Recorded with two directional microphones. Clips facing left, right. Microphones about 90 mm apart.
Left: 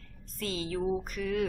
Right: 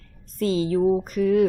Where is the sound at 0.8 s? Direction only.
60° right (ahead or behind).